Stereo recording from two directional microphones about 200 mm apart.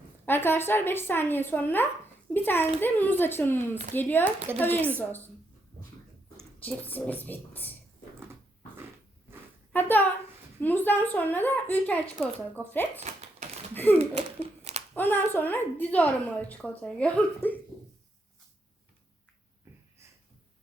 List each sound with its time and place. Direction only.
0.3 s a woman's voice: 10° left (ahead or behind)
4.5 s speech: 10° right (ahead or behind)
4.9 s a woman's voice: 10° left (ahead or behind)
6.6 s a woman's voice: 10° left (ahead or behind)
10.6 s a woman's voice: 10° left (ahead or behind)
13.0 s typewriter: 35° right (ahead or behind)
13.7 s a woman's voice: 10° left (ahead or behind)
14.0 s a sound: 30° right (ahead or behind)
14.9 s a woman's voice: 10° left (ahead or behind)